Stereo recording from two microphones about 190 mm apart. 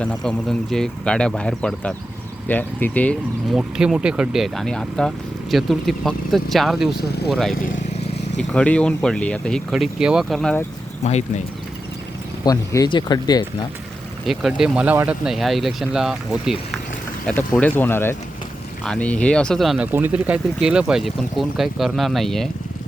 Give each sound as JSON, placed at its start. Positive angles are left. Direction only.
{"t": 0.0, "sound": "speech", "side_deg": 5}
{"t": 3.6, "sound": "speech", "side_deg": -5}
{"t": 11.0, "sound": "speech", "side_deg": 35}
{"t": 12.5, "sound": "speech", "side_deg": 20}
{"t": 14.3, "sound": "speech", "side_deg": 0}